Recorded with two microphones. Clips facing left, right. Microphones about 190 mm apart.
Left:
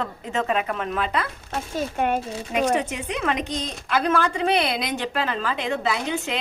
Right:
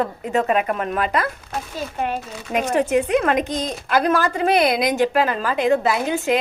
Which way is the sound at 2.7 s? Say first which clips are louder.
Right 6 dB; 60° right (ahead or behind).